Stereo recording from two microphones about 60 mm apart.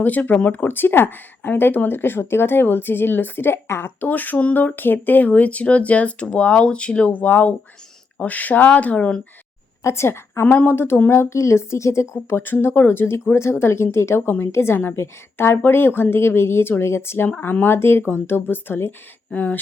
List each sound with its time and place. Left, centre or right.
0.0 s speech: left
9.8 s a woman's voice: left
10.4 s speech: left
12.4 s speech: left
14.3 s speech: left
14.5 s speech: left
15.5 s speech: left
19.3 s speech: left